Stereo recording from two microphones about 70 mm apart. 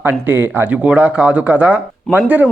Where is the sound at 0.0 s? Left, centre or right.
Right.